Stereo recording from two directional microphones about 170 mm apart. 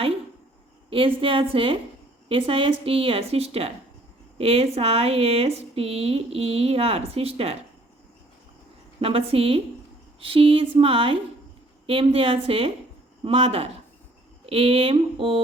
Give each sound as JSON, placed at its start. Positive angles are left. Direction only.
{"t": 0.9, "sound": "speech", "side_deg": -30}
{"t": 9.0, "sound": "speech", "side_deg": -35}